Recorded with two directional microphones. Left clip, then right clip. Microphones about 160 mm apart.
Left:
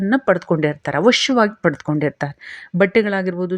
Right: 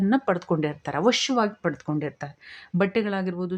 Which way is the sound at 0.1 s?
20° left (ahead or behind).